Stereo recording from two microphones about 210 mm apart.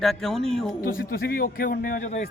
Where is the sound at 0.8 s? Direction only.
45° left (ahead or behind).